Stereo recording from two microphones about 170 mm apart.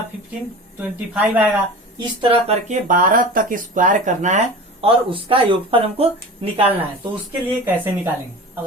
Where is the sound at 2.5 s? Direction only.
45° right (ahead or behind).